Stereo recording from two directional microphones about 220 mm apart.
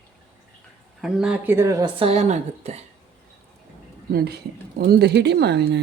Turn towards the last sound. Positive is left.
turn(degrees=-50)  # may be behind; listen again after turning